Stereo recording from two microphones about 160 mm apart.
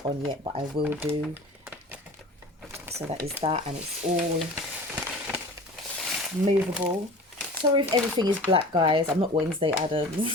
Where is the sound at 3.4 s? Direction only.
35° right (ahead or behind).